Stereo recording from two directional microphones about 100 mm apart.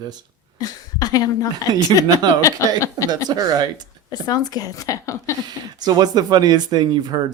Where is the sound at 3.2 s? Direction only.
40° right (ahead or behind).